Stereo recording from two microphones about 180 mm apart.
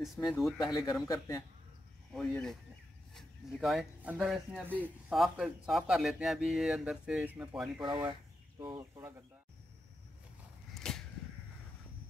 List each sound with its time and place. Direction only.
0.3 s speech: centre (ahead or behind)
0.6 s a man's voice: 20° left (ahead or behind)
2.1 s speech: centre (ahead or behind)
7.8 s speech: 25° right (ahead or behind)
10.7 s a sound: 5° left (ahead or behind)